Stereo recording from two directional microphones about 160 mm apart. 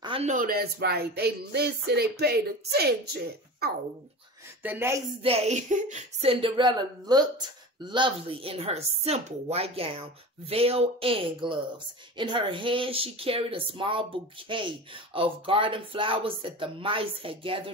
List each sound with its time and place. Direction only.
0.0 s a sound: 35° right (ahead or behind)
0.3 s speech: 60° right (ahead or behind); by 3.0 s 85° right
4.6 s a woman's voice: 15° right (ahead or behind)
5.2 s speech: 40° right (ahead or behind)
6.4 s speech: 30° right (ahead or behind)